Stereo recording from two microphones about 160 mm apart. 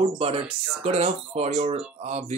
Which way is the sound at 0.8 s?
40° right (ahead or behind).